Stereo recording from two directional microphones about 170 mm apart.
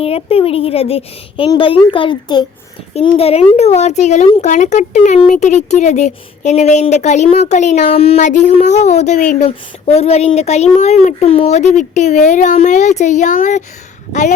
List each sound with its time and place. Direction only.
0.0 s speech: 35° left (ahead or behind)
2.9 s speech: 35° left (ahead or behind)